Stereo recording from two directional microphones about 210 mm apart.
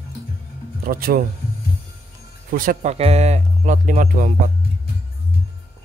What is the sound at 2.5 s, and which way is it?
Speech, 40° right (ahead or behind).